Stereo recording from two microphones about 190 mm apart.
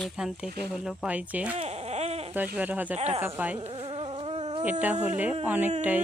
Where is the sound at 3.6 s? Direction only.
30° right (ahead or behind).